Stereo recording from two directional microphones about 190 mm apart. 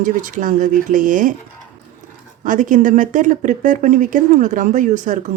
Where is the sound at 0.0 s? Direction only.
45° right (ahead or behind).